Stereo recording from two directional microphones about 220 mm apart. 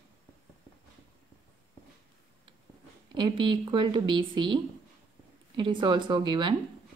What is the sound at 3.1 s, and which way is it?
Speech, 20° right (ahead or behind).